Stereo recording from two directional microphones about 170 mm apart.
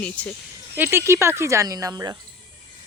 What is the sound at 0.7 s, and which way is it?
Speech, 10° right (ahead or behind).